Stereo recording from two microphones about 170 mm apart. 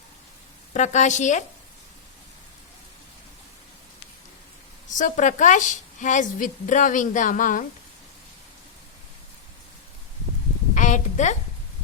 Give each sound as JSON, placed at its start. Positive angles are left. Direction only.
{"t": 0.7, "sound": "a woman's voice", "side_deg": 45}
{"t": 4.9, "sound": "a woman's voice", "side_deg": 50}
{"t": 10.8, "sound": "a sound", "side_deg": 45}